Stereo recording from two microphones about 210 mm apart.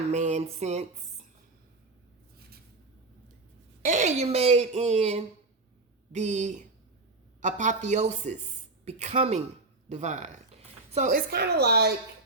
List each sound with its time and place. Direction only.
0.1 s speech: 35° right (ahead or behind)
3.8 s speech: 35° right (ahead or behind)
11.3 s a woman's voice: 50° right (ahead or behind)